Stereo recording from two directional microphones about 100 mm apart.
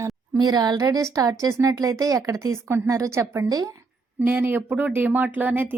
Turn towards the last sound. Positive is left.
turn(degrees=-15)  # may be behind; listen again after turning